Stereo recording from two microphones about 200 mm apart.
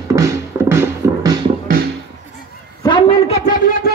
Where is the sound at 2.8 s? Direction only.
25° left (ahead or behind).